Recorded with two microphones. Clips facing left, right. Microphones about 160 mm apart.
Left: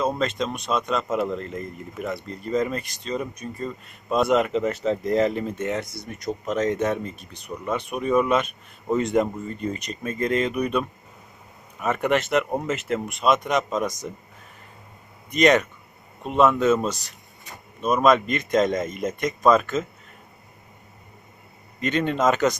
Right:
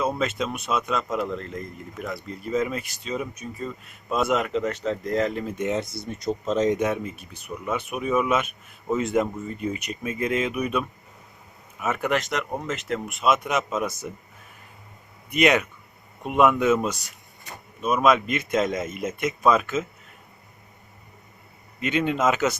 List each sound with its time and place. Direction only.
0.2 s speech: 5° right (ahead or behind)
5.5 s speech: 20° right (ahead or behind)
6.5 s speech: 20° right (ahead or behind)
15.3 s speech: 10° right (ahead or behind)
21.8 s speech: 10° right (ahead or behind)